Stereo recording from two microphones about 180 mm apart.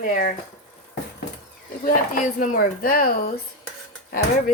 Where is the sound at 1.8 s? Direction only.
50° left (ahead or behind).